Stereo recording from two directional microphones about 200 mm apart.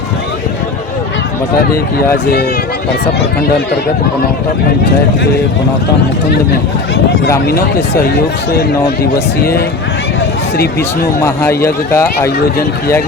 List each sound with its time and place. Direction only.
9.4 s speech: 50° left (ahead or behind)
11.2 s speech: 15° left (ahead or behind)